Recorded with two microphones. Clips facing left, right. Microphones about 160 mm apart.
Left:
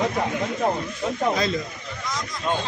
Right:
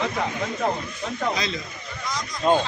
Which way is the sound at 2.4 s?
30° right (ahead or behind).